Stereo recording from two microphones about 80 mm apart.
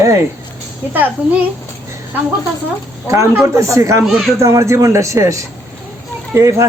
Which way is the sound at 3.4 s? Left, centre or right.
Right.